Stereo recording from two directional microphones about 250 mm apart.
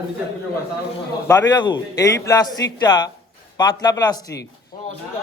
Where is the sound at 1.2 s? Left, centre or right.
Centre.